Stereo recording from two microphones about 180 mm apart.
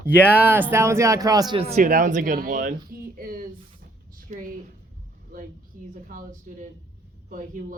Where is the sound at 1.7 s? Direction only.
45° right (ahead or behind).